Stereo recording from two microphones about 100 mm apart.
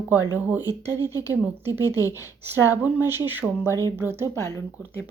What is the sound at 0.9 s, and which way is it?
Speech, 40° left (ahead or behind).